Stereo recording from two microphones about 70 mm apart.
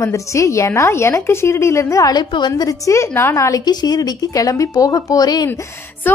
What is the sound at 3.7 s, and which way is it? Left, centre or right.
Speech, left.